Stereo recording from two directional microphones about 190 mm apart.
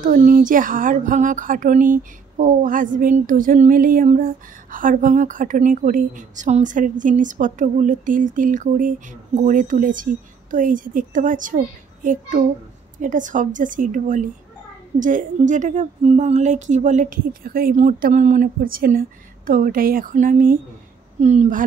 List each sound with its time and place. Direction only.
0.0 s a woman's voice: 45° right (ahead or behind)